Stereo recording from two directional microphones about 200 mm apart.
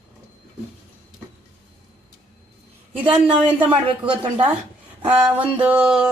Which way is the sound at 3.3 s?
10° right (ahead or behind).